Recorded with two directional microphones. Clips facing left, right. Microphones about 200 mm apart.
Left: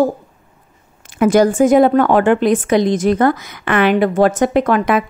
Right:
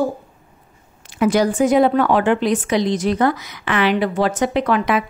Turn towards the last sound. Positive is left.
turn(degrees=50)  # may be behind; listen again after turning